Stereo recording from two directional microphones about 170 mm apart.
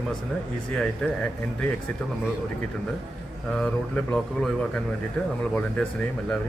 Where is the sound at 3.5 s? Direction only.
5° left (ahead or behind).